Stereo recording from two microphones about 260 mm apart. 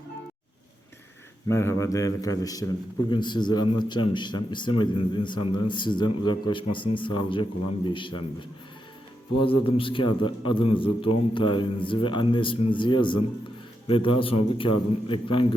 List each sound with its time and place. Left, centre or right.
1.5 s a man's voice: centre